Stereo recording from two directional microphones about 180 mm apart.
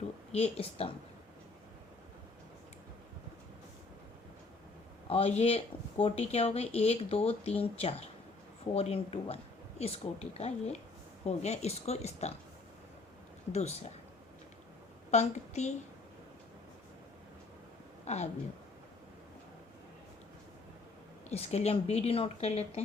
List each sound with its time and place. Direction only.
0.3 s speech: 35° left (ahead or behind)
5.0 s speech: 35° left (ahead or behind)
13.5 s speech: 40° left (ahead or behind)
15.1 s a woman's voice: 40° left (ahead or behind)
18.0 s a woman's voice: 40° left (ahead or behind)
21.2 s speech: 35° left (ahead or behind)